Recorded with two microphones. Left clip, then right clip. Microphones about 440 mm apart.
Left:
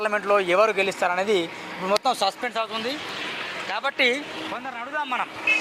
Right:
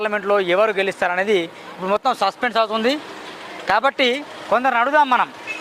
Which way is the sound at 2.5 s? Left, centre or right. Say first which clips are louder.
Right 9 dB; right.